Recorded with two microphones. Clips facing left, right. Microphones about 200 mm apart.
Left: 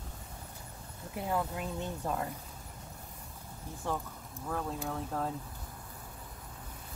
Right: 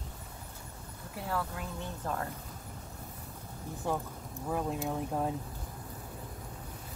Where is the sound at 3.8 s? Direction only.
15° right (ahead or behind).